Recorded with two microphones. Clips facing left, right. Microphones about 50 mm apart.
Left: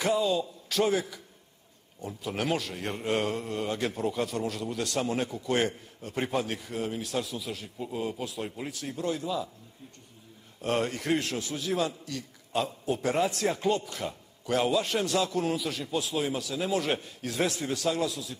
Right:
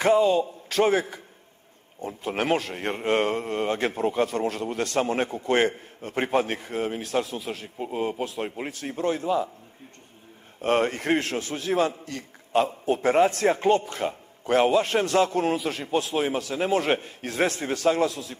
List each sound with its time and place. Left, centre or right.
0.0 s a man's voice: right
10.6 s a man's voice: right